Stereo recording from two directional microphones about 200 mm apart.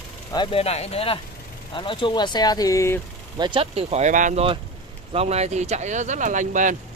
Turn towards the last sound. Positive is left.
turn(degrees=-40)  # may be behind; listen again after turning